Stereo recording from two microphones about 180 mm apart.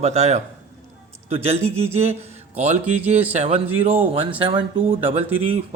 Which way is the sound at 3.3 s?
40° right (ahead or behind).